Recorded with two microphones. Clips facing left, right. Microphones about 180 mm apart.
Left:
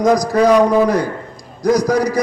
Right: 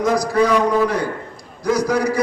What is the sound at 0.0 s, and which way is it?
A man's voice, 40° left (ahead or behind).